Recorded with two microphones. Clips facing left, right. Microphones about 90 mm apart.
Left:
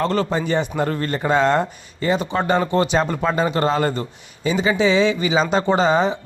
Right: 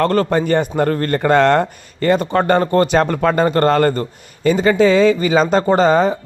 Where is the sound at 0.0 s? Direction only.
55° right (ahead or behind).